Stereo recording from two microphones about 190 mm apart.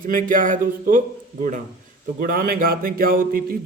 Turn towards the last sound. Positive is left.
turn(degrees=-50)  # may be behind; listen again after turning